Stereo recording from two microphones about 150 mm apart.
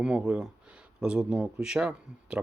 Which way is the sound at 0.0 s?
5° right (ahead or behind).